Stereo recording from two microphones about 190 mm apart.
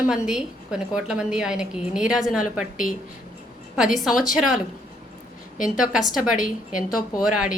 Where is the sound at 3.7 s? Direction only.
Centre (ahead or behind).